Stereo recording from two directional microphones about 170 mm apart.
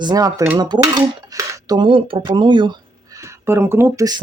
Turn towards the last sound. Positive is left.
turn(degrees=-20)  # may be behind; listen again after turning